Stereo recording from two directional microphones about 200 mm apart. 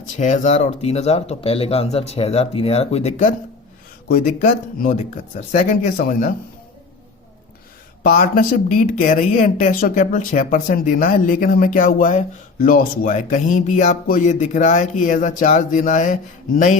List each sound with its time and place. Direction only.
0.0 s speech: 40° left (ahead or behind)
4.4 s speech: 40° left (ahead or behind)
8.0 s speech: 45° left (ahead or behind)